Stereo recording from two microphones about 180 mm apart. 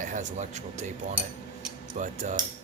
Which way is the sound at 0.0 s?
45° right (ahead or behind).